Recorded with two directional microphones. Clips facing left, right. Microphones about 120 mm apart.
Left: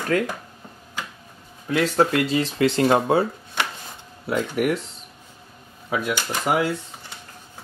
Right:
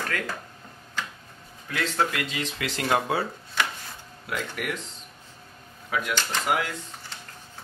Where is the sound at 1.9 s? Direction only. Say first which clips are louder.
Left 7 dB; 35° left (ahead or behind); by 4.8 s 20° left (ahead or behind).